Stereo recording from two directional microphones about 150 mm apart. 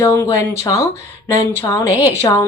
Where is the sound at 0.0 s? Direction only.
20° left (ahead or behind).